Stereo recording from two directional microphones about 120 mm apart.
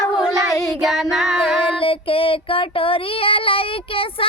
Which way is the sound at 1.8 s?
50° left (ahead or behind).